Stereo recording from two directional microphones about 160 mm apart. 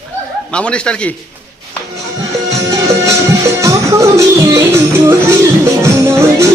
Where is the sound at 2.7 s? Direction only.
20° right (ahead or behind).